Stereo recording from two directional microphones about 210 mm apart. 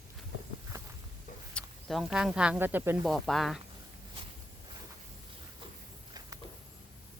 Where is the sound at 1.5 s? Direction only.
Centre (ahead or behind).